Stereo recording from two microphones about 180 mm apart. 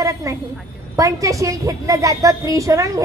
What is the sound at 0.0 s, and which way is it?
A woman's voice, 20° right (ahead or behind).